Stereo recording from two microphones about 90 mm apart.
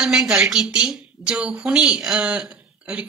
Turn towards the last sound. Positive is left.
turn(degrees=-15)  # may be behind; listen again after turning